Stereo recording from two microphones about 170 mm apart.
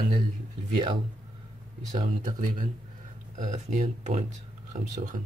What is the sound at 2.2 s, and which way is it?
Speech, 50° right (ahead or behind).